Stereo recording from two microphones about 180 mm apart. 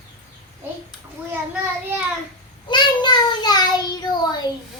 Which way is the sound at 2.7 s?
25° left (ahead or behind).